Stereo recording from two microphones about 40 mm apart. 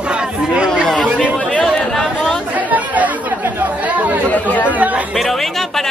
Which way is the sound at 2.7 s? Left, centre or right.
Right.